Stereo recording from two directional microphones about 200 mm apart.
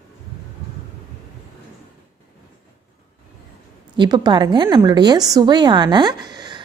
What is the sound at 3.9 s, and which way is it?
A woman's voice, 20° right (ahead or behind).